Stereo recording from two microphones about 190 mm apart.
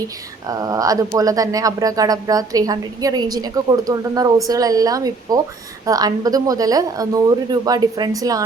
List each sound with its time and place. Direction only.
0.4 s speech: 20° right (ahead or behind)